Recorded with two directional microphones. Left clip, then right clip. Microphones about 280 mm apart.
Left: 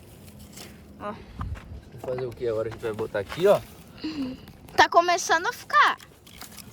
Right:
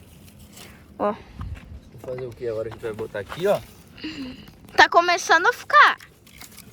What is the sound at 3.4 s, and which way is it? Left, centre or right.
Speech, centre.